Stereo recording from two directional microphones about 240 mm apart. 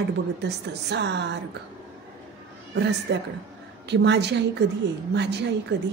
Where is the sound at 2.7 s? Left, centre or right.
Right.